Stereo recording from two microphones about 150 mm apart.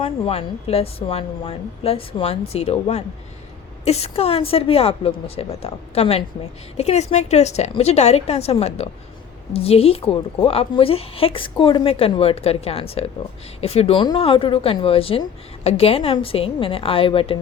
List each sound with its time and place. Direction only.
0.0 s a woman's voice: 40° left (ahead or behind)